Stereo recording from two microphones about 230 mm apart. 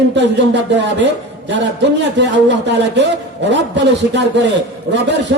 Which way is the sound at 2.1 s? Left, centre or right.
Right.